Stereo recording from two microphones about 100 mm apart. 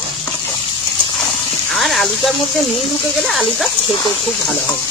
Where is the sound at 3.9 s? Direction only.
55° left (ahead or behind).